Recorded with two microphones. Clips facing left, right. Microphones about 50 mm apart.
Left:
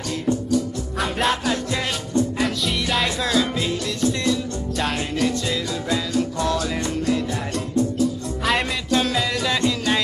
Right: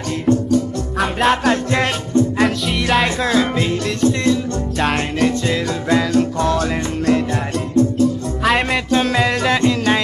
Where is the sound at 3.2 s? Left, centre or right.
Right.